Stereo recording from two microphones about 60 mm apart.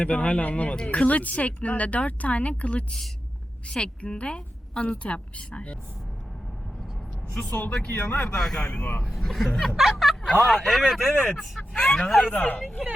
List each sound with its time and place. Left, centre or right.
0.0 s speech: left
3.7 s speech: centre
7.5 s speech: left
8.4 s speech: centre
8.6 s speech: centre
9.0 s speech: centre
11.7 s speech: centre